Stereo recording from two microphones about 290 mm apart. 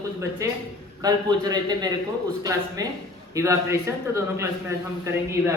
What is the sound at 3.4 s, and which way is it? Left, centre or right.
A man's voice, centre.